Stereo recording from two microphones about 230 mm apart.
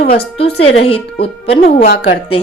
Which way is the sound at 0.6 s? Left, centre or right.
Left.